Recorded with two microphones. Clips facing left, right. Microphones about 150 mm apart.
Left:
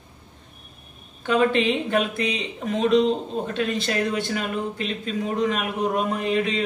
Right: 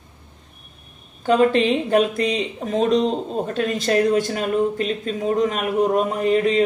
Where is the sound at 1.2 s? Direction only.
40° right (ahead or behind).